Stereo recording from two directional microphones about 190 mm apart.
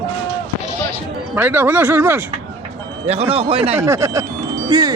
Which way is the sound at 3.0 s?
30° right (ahead or behind).